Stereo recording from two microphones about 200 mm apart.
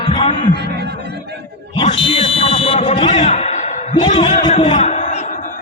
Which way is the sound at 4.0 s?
30° left (ahead or behind).